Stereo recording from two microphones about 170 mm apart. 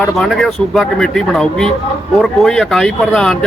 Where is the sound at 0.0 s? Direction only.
Centre (ahead or behind).